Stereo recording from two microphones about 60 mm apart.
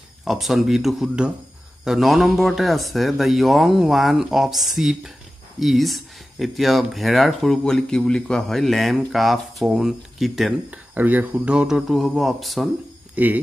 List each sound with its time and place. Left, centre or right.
0.2 s speech: centre
7.4 s speech: centre
10.7 s speech: right
11.9 s speech: centre
13.1 s speech: right